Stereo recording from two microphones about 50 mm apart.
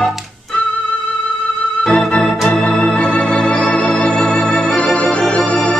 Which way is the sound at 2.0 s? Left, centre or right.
Centre.